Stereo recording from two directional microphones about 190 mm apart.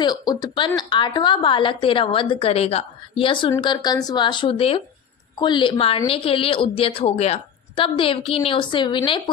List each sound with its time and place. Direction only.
0.0 s a woman's voice: 20° left (ahead or behind)